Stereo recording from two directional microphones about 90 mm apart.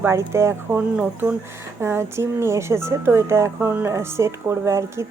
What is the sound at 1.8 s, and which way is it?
Speech, 30° right (ahead or behind).